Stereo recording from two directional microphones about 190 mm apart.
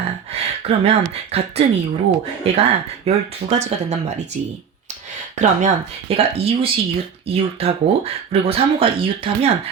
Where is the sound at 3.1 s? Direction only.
35° right (ahead or behind).